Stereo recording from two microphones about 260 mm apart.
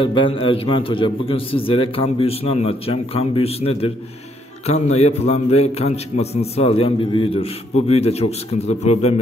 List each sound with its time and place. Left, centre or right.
0.0 s a man's voice: centre